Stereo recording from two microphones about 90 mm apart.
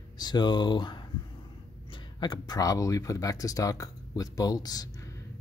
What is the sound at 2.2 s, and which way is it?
Speech, 50° left (ahead or behind).